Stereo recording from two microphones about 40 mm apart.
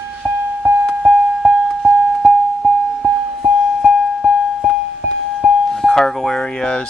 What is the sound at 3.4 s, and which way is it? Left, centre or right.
Music, centre.